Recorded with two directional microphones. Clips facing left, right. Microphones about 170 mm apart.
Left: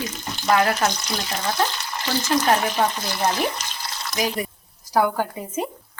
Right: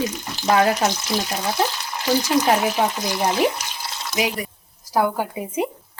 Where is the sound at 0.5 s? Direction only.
20° right (ahead or behind).